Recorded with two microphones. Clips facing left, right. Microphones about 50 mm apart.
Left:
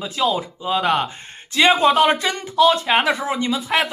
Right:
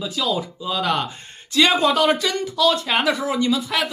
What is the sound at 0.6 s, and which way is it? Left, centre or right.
Speech, left.